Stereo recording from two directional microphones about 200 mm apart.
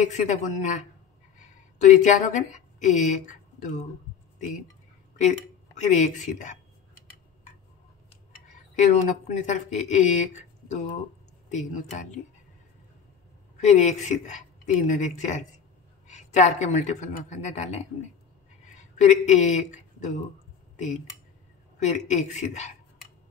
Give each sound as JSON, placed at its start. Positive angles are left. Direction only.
{"t": 0.0, "sound": "speech", "side_deg": 35}
{"t": 5.8, "sound": "speech", "side_deg": 35}
{"t": 8.7, "sound": "speech", "side_deg": 35}
{"t": 13.7, "sound": "speech", "side_deg": 35}
{"t": 18.7, "sound": "a sound", "side_deg": 35}
{"t": 20.7, "sound": "speech", "side_deg": 35}